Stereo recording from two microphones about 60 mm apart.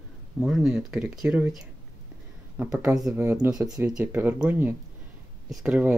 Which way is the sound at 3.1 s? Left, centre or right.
Right.